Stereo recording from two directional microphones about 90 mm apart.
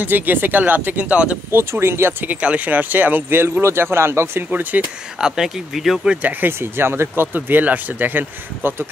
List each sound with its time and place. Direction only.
0.0 s speech: 20° right (ahead or behind)
1.5 s speech: 30° right (ahead or behind)
2.4 s speech: 15° right (ahead or behind)
5.2 s speech: 5° right (ahead or behind)
6.2 s speech: 25° right (ahead or behind)